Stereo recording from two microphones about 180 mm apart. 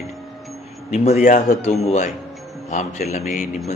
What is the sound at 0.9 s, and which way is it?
Speech, 40° left (ahead or behind).